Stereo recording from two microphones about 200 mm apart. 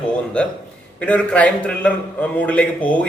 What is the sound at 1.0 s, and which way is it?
A man's voice, 5° left (ahead or behind).